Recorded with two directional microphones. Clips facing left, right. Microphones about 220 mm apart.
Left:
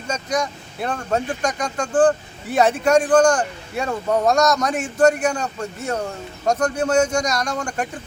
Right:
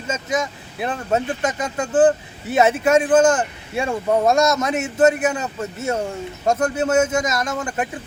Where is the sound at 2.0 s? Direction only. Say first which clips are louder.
Right 1 dB; 25° right (ahead or behind).